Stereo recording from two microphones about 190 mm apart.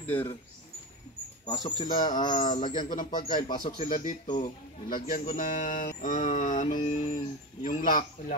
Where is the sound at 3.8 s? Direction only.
40° left (ahead or behind).